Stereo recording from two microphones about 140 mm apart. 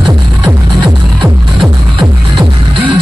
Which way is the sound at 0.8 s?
35° right (ahead or behind).